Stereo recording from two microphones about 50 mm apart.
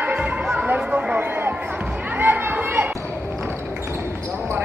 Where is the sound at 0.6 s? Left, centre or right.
Right.